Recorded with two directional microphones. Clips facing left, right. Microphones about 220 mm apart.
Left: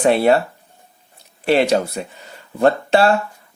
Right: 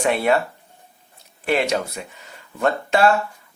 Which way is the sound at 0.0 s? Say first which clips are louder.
Left 5 dB; 30° left (ahead or behind).